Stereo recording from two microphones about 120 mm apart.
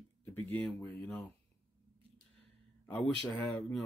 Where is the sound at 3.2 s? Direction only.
15° left (ahead or behind).